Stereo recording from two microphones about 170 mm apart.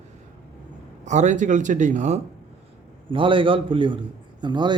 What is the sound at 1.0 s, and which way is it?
Speech, 45° right (ahead or behind).